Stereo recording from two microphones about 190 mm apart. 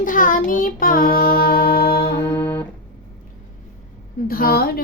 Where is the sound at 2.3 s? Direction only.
10° left (ahead or behind).